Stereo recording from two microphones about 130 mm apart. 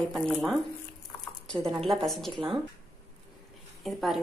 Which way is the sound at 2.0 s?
Centre (ahead or behind).